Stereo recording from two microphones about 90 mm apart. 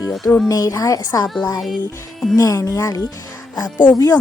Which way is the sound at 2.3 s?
40° left (ahead or behind).